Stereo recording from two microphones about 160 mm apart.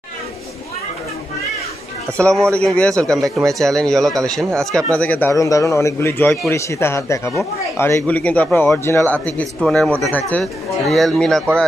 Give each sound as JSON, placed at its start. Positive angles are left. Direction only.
{"t": 2.1, "sound": "speech", "side_deg": 5}